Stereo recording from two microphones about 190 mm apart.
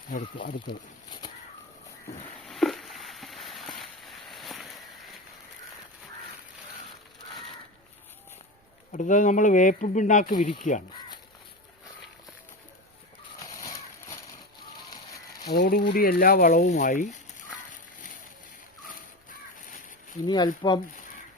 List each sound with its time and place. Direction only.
0.1 s speech: 45° left (ahead or behind)
2.5 s a sound: centre (ahead or behind)
8.9 s speech: 40° left (ahead or behind)
13.4 s horse: 20° left (ahead or behind)
15.4 s speech: 55° left (ahead or behind)
16.6 s speech: 40° left (ahead or behind)
20.2 s speech: 20° left (ahead or behind)